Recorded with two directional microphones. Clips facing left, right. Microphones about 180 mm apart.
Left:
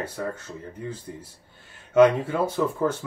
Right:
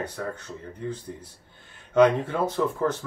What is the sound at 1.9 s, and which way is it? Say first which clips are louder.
Speech: left 2 dB; 5° left (ahead or behind).